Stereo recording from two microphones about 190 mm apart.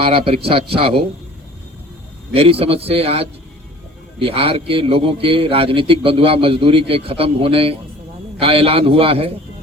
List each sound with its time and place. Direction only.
0.0 s a man's voice: 30° right (ahead or behind)
2.3 s a man's voice: 30° right (ahead or behind)